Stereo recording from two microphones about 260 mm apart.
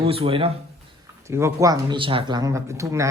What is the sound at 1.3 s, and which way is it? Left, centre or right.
Speech, centre.